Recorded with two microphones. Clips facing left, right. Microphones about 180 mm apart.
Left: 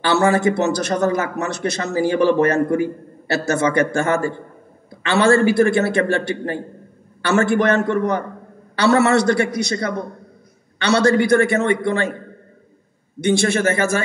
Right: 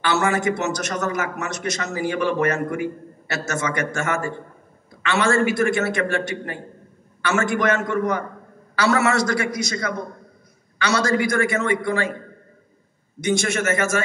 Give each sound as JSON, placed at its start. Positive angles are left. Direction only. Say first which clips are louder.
{"t": 0.0, "sound": "a man's voice", "louder": "left 5 dB", "side_deg": 30}
{"t": 11.1, "sound": "a man's voice", "louder": "left 6 dB", "side_deg": 35}
{"t": 13.2, "sound": "a man's voice", "louder": "left 5 dB", "side_deg": 30}